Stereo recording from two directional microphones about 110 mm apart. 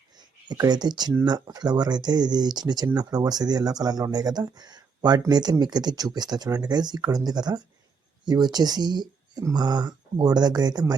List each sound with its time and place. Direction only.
0.4 s speech: 40° right (ahead or behind)